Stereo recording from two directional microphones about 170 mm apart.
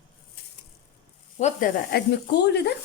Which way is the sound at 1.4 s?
50° left (ahead or behind).